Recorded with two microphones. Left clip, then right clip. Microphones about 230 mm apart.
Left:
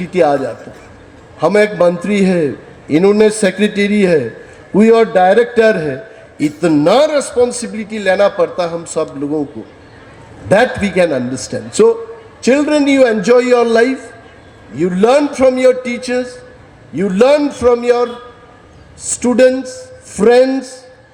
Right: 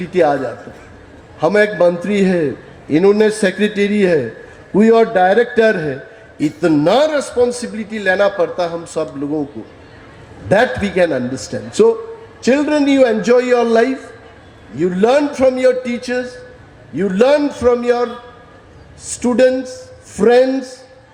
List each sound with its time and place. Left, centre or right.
0.0 s a man's voice: left
10.5 s a man's voice: left